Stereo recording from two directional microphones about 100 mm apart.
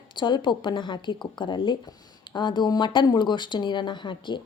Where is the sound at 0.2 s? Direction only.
50° left (ahead or behind).